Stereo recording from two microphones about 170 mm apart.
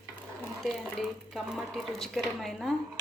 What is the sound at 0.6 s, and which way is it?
Speech, centre (ahead or behind).